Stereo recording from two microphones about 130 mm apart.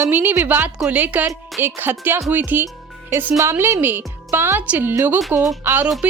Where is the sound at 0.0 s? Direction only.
15° right (ahead or behind).